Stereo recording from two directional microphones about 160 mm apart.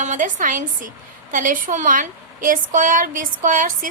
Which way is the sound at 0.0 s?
50° right (ahead or behind).